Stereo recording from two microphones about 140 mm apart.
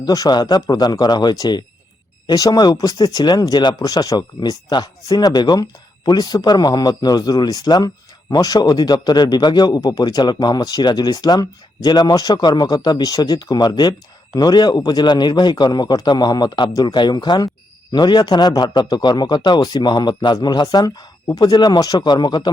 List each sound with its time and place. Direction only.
0.0 s a man's voice: 25° left (ahead or behind)